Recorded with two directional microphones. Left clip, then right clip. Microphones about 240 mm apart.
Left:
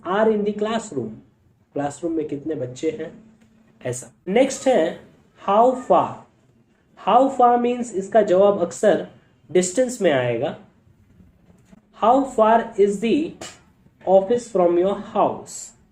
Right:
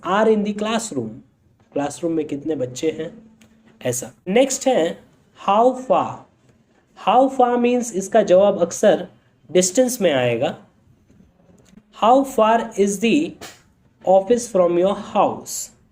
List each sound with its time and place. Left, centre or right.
0.0 s speech: right
11.9 s speech: right